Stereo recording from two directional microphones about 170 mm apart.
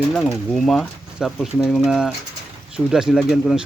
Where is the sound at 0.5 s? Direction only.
Centre (ahead or behind).